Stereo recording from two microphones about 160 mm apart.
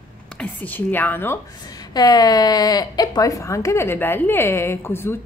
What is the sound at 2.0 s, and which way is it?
A woman's voice, 25° left (ahead or behind).